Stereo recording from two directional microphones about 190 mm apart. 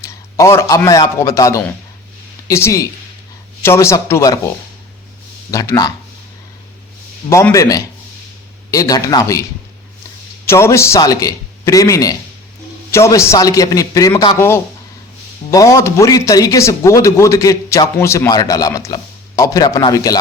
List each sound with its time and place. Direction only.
0.0 s a man's voice: 15° left (ahead or behind)
5.5 s speech: 20° left (ahead or behind)
7.3 s a man's voice: 15° left (ahead or behind)
10.4 s a man's voice: 15° left (ahead or behind)